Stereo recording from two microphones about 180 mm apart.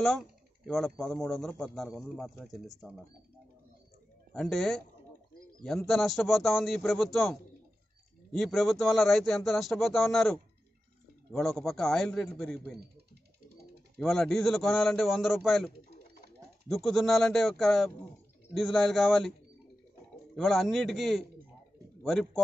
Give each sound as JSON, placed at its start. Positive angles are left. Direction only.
{"t": 0.7, "sound": "speech", "side_deg": 5}
{"t": 4.3, "sound": "speech", "side_deg": 5}
{"t": 13.9, "sound": "speech", "side_deg": 5}
{"t": 20.3, "sound": "speech", "side_deg": 0}